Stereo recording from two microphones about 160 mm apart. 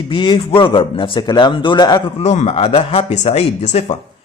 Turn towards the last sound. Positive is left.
turn(degrees=40)  # may be behind; listen again after turning